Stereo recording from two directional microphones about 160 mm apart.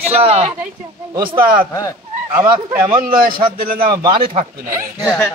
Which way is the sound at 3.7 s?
30° right (ahead or behind).